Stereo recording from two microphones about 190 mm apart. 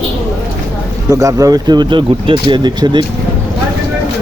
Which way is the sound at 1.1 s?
20° right (ahead or behind).